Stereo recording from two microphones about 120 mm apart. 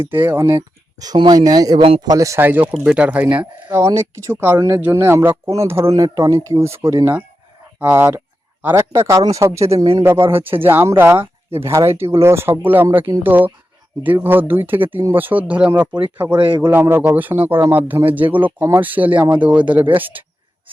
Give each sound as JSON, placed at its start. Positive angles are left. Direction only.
{"t": 0.0, "sound": "speech", "side_deg": -15}
{"t": 0.5, "sound": "speech", "side_deg": -35}
{"t": 3.8, "sound": "speech", "side_deg": -25}
{"t": 9.7, "sound": "speech", "side_deg": -50}
{"t": 10.4, "sound": "speech", "side_deg": -15}
{"t": 16.3, "sound": "speech", "side_deg": -40}
{"t": 16.6, "sound": "speech", "side_deg": -15}